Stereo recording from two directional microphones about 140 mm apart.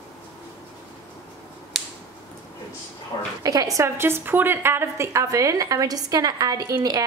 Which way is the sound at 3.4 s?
25° right (ahead or behind).